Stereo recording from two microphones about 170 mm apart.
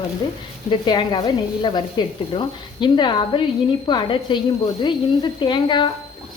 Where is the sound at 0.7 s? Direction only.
25° left (ahead or behind).